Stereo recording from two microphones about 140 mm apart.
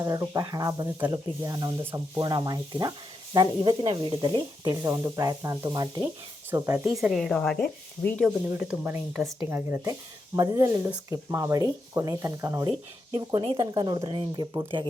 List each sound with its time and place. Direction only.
0.0 s speech: 25° right (ahead or behind)
1.8 s speech: 15° right (ahead or behind)
2.2 s speech: 30° right (ahead or behind)
6.5 s speech: 20° right (ahead or behind)
7.1 s speech: centre (ahead or behind)
8.4 s speech: 15° right (ahead or behind)
13.1 s speech: 40° right (ahead or behind)